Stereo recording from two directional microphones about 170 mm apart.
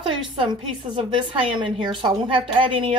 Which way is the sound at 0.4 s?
30° right (ahead or behind).